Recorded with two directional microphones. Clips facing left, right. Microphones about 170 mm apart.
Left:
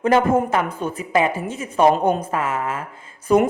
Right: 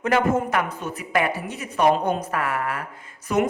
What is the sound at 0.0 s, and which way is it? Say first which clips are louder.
A woman's voice: left 4 dB; 25° left (ahead or behind).